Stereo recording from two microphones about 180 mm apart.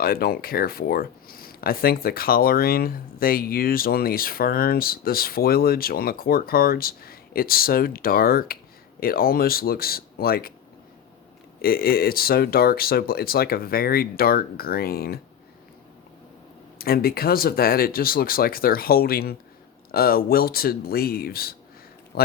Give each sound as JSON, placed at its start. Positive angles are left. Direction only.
{"t": 0.0, "sound": "speech", "side_deg": 55}
{"t": 11.6, "sound": "speech", "side_deg": 55}
{"t": 16.7, "sound": "speech", "side_deg": 55}